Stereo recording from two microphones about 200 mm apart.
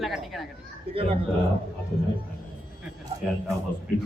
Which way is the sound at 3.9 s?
5° left (ahead or behind).